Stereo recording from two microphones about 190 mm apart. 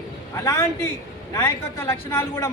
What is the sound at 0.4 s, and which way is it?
A man's voice, 10° left (ahead or behind).